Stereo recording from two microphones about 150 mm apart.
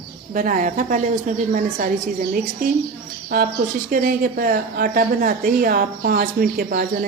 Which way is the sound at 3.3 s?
75° right (ahead or behind).